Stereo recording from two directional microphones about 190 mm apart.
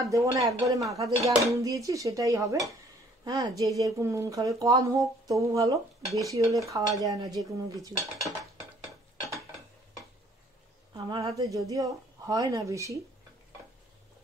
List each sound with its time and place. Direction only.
0.0 s speech: 15° right (ahead or behind)
10.9 s speech: 20° right (ahead or behind)